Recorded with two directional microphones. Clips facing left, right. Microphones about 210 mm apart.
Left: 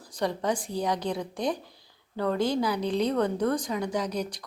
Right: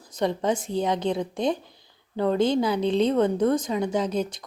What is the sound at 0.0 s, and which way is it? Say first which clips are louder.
A woman's voice: right 4 dB; 20° right (ahead or behind).